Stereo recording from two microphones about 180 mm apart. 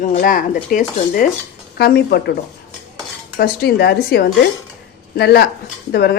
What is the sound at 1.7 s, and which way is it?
Speech, 60° left (ahead or behind).